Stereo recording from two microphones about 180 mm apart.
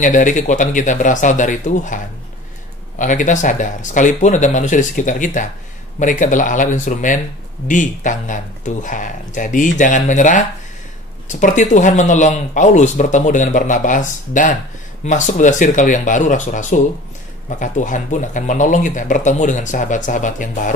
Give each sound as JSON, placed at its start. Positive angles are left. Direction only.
{"t": 0.0, "sound": "speech", "side_deg": 45}
{"t": 3.0, "sound": "speech", "side_deg": 45}